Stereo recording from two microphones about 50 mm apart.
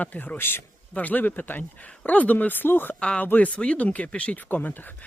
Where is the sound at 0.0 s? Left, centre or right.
Left.